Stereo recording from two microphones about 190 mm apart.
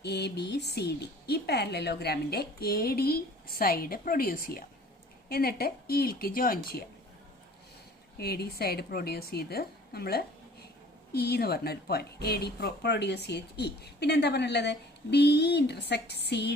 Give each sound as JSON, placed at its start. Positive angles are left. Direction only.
{"t": 0.0, "sound": "a woman's voice", "side_deg": 60}
{"t": 8.2, "sound": "speech", "side_deg": 55}